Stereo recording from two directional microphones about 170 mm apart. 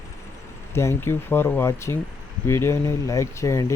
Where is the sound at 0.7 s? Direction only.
15° left (ahead or behind).